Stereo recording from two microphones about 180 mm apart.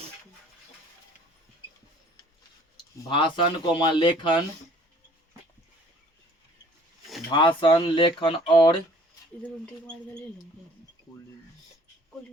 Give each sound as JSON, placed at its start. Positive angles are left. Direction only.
{"t": 3.1, "sound": "speech", "side_deg": 25}
{"t": 7.3, "sound": "speech", "side_deg": 25}
{"t": 9.4, "sound": "speech", "side_deg": 5}